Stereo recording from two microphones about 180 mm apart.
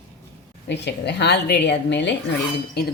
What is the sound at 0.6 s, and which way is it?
A woman's voice, 70° left (ahead or behind).